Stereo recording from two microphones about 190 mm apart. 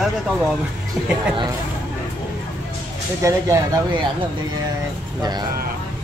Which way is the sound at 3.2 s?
15° right (ahead or behind).